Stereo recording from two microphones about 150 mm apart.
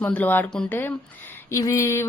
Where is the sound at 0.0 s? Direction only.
10° left (ahead or behind).